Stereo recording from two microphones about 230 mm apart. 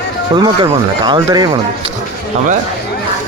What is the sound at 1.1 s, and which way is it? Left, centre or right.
Speech, centre.